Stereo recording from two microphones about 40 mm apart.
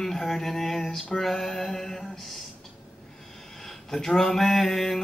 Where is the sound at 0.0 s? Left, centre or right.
Centre.